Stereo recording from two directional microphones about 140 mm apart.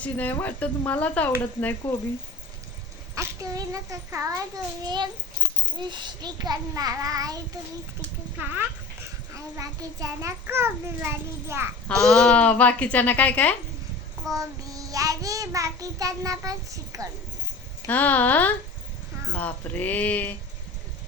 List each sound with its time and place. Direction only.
0.0 s a woman's voice: 10° left (ahead or behind)
3.2 s child singing: 25° right (ahead or behind)
9.3 s child singing: 25° right (ahead or behind)
12.0 s a woman's voice: 5° left (ahead or behind)
14.3 s child singing: 25° right (ahead or behind)
17.8 s a woman's voice: 10° left (ahead or behind)